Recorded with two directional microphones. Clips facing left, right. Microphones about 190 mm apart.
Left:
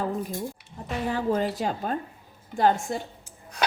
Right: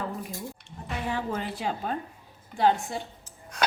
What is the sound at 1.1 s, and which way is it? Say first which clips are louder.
A woman's voice: left 8 dB; 40° left (ahead or behind).